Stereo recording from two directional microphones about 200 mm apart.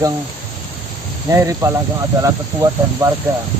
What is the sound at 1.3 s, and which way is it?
Speech, 15° right (ahead or behind).